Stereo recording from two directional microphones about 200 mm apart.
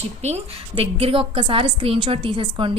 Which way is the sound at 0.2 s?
35° right (ahead or behind).